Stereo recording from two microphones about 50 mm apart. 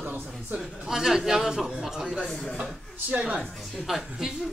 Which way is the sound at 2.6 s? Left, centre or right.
Right.